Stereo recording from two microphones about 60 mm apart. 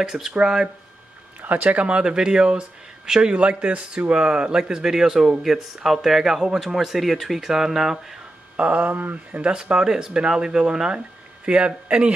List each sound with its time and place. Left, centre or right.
0.0 s a man's voice: centre
1.4 s a man's voice: right; by 8.2 s centre
8.5 s a man's voice: centre